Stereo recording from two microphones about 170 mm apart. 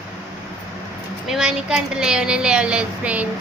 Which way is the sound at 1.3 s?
5° right (ahead or behind).